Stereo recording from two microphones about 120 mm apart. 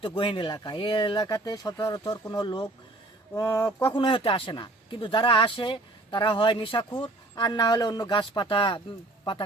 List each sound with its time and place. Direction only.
0.0 s speech: 45° left (ahead or behind)
3.3 s speech: 25° left (ahead or behind)
3.9 s speech: 45° left (ahead or behind)